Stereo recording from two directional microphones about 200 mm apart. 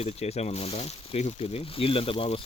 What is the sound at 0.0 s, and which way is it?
Speech, 30° left (ahead or behind).